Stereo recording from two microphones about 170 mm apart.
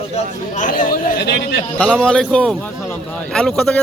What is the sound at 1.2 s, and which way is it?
Speech, 80° left.